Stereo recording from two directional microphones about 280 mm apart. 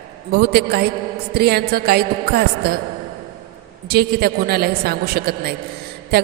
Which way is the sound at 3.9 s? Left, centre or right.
Right.